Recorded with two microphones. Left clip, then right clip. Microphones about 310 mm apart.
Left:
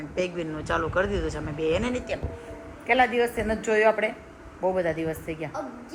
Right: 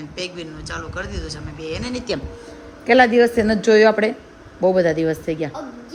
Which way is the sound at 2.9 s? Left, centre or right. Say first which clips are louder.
Right 8 dB; right.